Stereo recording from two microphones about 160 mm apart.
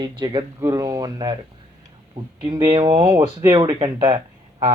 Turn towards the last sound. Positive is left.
turn(degrees=-30)  # may be behind; listen again after turning